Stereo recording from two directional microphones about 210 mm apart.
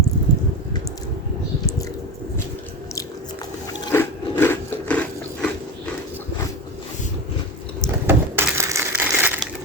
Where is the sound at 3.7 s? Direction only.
10° left (ahead or behind).